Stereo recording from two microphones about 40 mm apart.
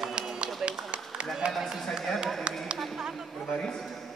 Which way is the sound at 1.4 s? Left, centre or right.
Right.